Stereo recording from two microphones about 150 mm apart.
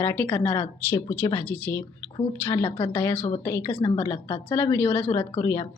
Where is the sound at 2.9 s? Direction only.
15° left (ahead or behind).